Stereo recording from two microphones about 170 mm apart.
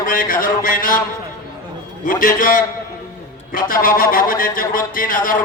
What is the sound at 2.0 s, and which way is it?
A man's voice, 55° left (ahead or behind).